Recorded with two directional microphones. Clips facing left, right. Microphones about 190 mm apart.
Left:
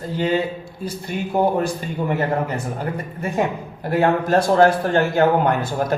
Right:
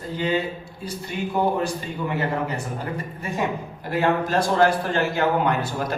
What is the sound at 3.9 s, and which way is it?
A man's voice, 50° left (ahead or behind).